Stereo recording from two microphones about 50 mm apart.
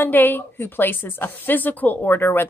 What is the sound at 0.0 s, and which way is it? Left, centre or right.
A woman's voice, left.